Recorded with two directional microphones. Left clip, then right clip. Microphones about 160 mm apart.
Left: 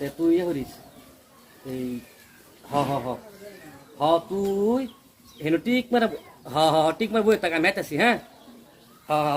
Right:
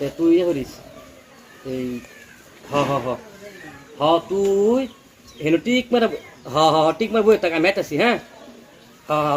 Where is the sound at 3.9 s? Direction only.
10° left (ahead or behind).